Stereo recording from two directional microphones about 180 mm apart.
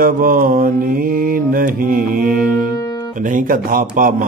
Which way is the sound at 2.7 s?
20° left (ahead or behind).